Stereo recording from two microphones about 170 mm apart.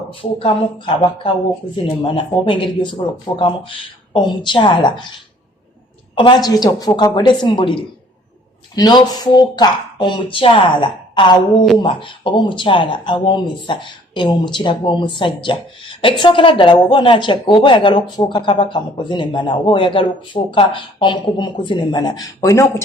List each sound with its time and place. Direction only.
0.1 s speech: 35° left (ahead or behind)
2.4 s speech: 30° left (ahead or behind)
6.1 s speech: 25° left (ahead or behind)